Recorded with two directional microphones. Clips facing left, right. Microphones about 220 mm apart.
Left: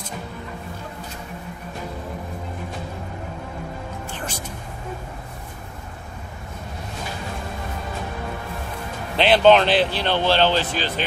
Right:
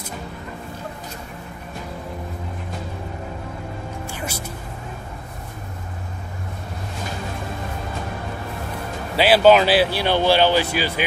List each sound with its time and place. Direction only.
4.1 s music: 10° right (ahead or behind)
9.1 s speech: 5° right (ahead or behind)